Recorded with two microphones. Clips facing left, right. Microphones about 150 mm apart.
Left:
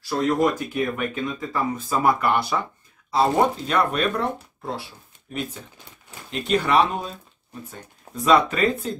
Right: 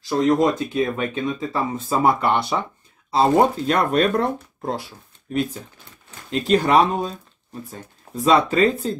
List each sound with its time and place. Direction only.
0.2 s speech: 20° right (ahead or behind)